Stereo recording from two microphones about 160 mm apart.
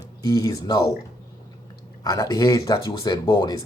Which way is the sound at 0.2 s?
20° left (ahead or behind).